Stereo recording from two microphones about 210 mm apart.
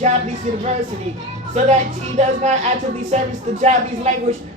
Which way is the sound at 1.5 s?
35° right (ahead or behind).